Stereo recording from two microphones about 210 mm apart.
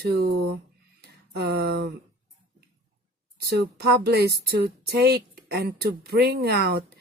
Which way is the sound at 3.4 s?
50° right (ahead or behind).